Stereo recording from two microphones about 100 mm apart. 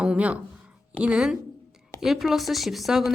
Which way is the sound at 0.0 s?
10° right (ahead or behind).